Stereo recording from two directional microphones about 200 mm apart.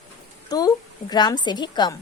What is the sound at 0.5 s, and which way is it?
A woman's voice, 20° left (ahead or behind).